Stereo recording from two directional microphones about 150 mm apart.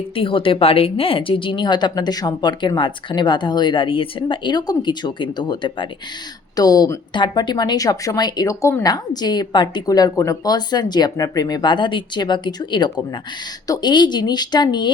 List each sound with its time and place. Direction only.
0.2 s a woman's voice: 35° left (ahead or behind)